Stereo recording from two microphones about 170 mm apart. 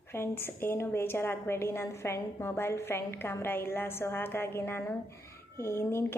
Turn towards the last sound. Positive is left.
turn(degrees=15)  # may be behind; listen again after turning